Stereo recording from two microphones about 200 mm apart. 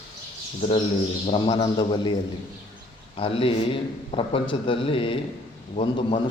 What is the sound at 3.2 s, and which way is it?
A man's voice, 25° left (ahead or behind).